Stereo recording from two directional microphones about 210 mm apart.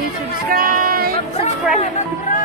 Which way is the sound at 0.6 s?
45° right (ahead or behind).